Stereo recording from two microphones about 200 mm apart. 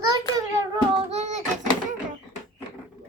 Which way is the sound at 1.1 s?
35° right (ahead or behind).